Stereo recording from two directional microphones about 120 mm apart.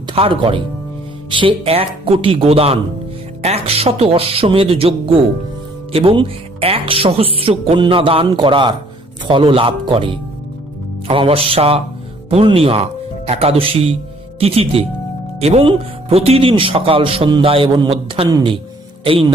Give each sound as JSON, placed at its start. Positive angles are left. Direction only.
{"t": 0.1, "sound": "speech", "side_deg": -50}